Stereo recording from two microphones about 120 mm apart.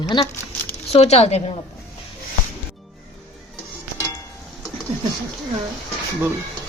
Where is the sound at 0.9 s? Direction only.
65° left (ahead or behind).